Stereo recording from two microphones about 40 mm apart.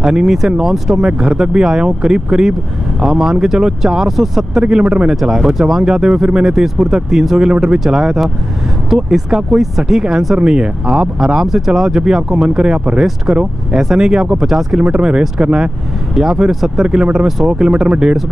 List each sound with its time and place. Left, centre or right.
0.0 s speech: centre
5.1 s speech: centre; by 13.7 s right
13.7 s speech: centre
14.8 s speech: right
16.8 s speech: right